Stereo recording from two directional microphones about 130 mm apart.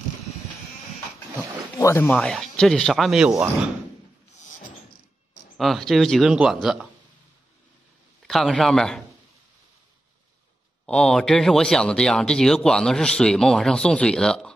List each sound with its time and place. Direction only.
1.8 s speech: 20° left (ahead or behind)
2.1 s speech: 5° left (ahead or behind)
5.6 s speech: centre (ahead or behind)
8.3 s speech: centre (ahead or behind)
10.9 s speech: 5° left (ahead or behind)